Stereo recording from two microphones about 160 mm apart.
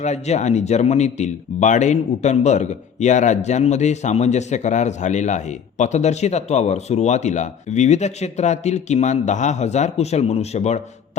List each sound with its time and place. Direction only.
0.0 s speech: 45° left (ahead or behind)